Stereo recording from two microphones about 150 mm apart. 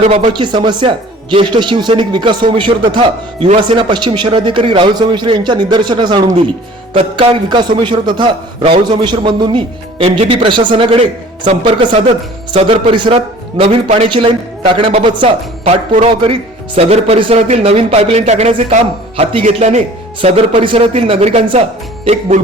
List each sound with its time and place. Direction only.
0.3 s a man's voice: 30° right (ahead or behind)
11.9 s speech: 50° right (ahead or behind)
12.5 s a man's voice: 35° right (ahead or behind)
15.2 s speech: 55° right (ahead or behind)
16.2 s a man's voice: 40° right (ahead or behind)